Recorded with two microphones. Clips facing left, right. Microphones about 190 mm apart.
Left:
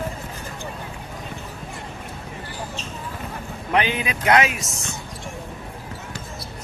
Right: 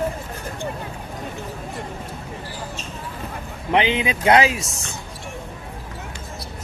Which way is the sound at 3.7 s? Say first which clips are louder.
Right 3 dB; 20° right (ahead or behind).